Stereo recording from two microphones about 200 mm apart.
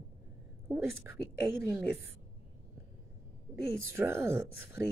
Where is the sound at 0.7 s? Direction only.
10° right (ahead or behind).